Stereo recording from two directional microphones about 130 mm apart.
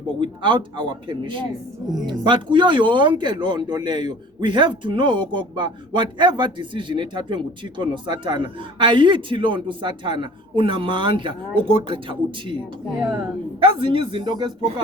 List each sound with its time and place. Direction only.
0.2 s speech: 40° right (ahead or behind)